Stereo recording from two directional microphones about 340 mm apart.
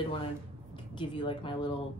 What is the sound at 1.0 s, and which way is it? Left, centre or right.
Speech, centre.